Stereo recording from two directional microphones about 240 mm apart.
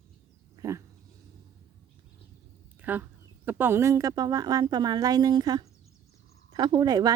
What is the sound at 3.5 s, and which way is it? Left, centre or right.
A woman's voice, centre.